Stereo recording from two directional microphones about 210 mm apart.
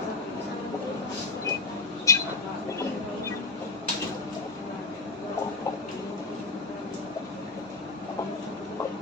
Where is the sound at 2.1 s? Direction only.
15° left (ahead or behind).